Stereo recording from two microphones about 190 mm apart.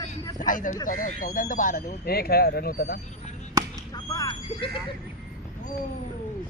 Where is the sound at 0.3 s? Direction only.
45° left (ahead or behind).